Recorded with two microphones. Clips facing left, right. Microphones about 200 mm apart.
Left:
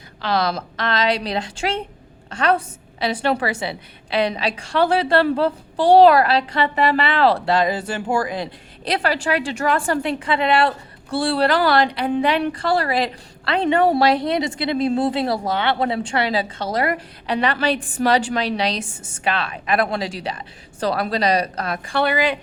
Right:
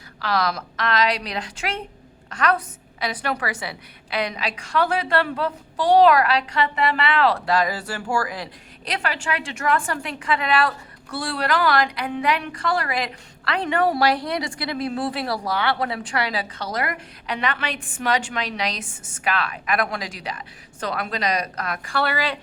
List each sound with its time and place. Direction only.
0.2 s a woman's voice: 25° left (ahead or behind)